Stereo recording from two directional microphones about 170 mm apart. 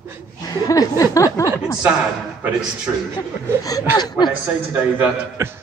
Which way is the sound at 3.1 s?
20° left (ahead or behind).